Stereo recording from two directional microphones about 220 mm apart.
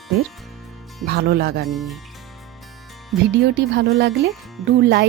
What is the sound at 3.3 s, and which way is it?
Speech, 50° right (ahead or behind).